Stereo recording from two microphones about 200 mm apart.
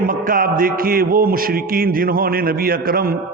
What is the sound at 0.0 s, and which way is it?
A man's voice, 45° right (ahead or behind).